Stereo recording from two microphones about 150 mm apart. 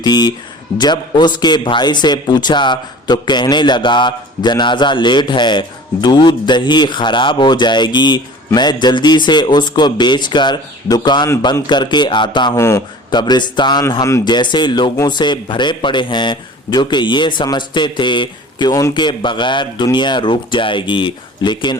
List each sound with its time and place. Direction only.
0.0 s a man's voice: 30° left (ahead or behind)
12.5 s a man's voice: 20° left (ahead or behind)
13.1 s a man's voice: 30° left (ahead or behind)